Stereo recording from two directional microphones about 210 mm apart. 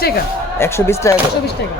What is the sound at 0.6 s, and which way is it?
Speech, 10° left (ahead or behind).